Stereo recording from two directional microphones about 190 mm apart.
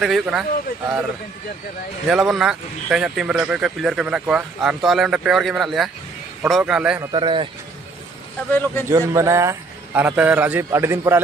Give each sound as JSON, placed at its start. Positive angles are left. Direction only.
{"t": 0.0, "sound": "a man's voice", "side_deg": 0}
{"t": 2.0, "sound": "a man's voice", "side_deg": 0}
{"t": 7.1, "sound": "a man's voice", "side_deg": -25}
{"t": 8.5, "sound": "a man's voice", "side_deg": 10}
{"t": 8.8, "sound": "a man's voice", "side_deg": -15}